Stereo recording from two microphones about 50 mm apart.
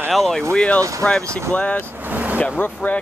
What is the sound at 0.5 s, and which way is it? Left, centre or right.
Speech, left.